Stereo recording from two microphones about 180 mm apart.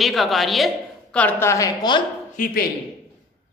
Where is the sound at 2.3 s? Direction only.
50° left (ahead or behind).